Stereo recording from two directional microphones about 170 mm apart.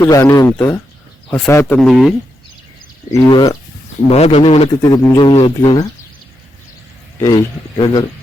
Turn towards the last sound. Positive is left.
turn(degrees=25)  # may be behind; listen again after turning